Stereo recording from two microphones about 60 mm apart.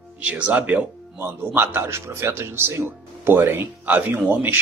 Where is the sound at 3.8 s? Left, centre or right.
Right.